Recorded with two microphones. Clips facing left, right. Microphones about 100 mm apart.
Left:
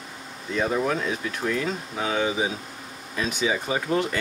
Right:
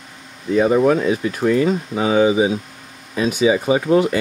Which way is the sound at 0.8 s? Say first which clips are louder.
Right 10 dB; 5° right (ahead or behind).